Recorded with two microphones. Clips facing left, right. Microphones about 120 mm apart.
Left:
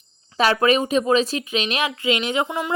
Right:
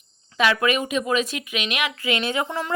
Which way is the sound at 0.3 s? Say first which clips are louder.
Left 3 dB; 35° left (ahead or behind).